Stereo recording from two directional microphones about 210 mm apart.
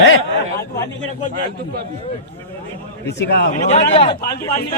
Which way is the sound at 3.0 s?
50° left (ahead or behind).